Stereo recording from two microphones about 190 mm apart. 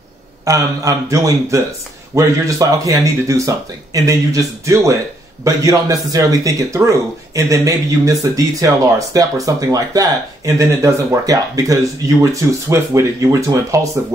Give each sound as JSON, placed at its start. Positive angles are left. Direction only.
{"t": 0.5, "sound": "speech", "side_deg": -15}